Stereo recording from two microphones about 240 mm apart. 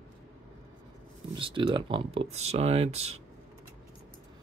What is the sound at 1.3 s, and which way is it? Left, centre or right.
Speech, right.